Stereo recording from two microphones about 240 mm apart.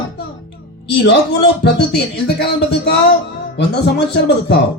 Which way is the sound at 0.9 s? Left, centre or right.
Left.